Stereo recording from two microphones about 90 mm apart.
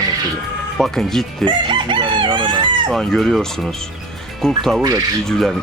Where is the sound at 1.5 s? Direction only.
60° right (ahead or behind).